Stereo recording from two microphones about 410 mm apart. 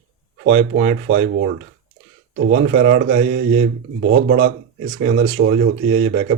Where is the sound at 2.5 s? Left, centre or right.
Right.